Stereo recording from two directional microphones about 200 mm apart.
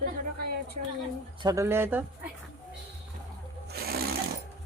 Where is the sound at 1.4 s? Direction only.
15° right (ahead or behind).